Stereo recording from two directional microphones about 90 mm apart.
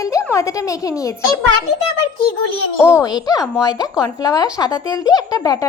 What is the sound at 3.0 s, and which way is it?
Speech, 45° left (ahead or behind).